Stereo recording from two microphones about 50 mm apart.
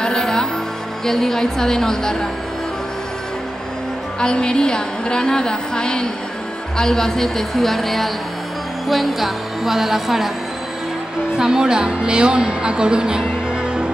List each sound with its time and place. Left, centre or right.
0.0 s music: centre
1.0 s a woman's voice: centre
4.2 s a woman's voice: centre
11.3 s a woman's voice: centre